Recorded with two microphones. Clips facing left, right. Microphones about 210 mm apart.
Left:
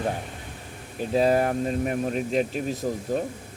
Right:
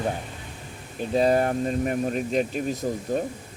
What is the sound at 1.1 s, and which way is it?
Speech, 5° left (ahead or behind).